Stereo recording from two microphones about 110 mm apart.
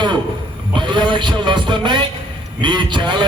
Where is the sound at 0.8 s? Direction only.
45° right (ahead or behind).